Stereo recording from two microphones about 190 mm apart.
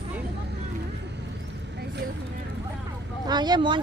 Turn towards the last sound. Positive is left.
turn(degrees=-25)  # may be behind; listen again after turning